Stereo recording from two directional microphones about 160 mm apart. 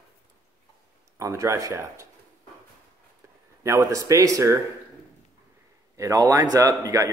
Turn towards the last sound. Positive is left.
turn(degrees=-20)  # may be behind; listen again after turning